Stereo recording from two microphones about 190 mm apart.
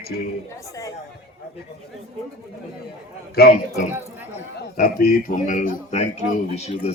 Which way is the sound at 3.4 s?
55° left (ahead or behind).